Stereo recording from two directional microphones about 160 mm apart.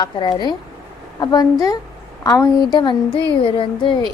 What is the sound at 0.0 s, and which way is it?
A woman's voice, 30° left (ahead or behind).